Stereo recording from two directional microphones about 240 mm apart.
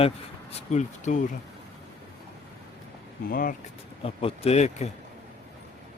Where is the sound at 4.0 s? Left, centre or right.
Left.